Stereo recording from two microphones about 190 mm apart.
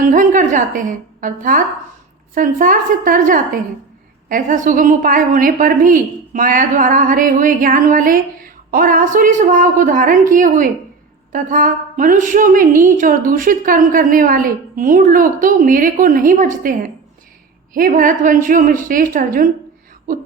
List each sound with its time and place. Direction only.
0.0 s a woman's voice: 45° right (ahead or behind)